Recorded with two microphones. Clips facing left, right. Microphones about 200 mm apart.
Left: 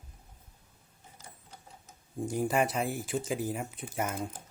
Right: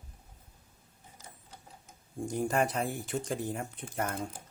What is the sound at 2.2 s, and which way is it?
Speech, 5° left (ahead or behind).